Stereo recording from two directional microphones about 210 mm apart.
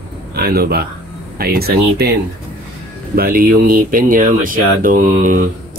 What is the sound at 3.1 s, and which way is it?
Speech, 45° right (ahead or behind).